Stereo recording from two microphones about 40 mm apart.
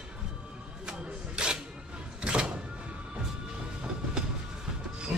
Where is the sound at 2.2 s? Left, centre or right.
Right.